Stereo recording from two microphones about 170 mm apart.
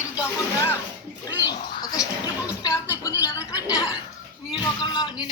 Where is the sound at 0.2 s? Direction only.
15° left (ahead or behind).